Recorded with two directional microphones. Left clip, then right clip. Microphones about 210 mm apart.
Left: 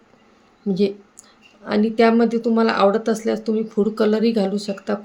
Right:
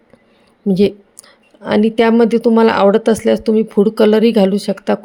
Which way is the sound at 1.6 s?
40° right (ahead or behind).